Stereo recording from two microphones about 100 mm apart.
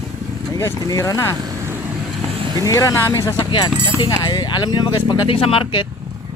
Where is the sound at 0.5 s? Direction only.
35° left (ahead or behind).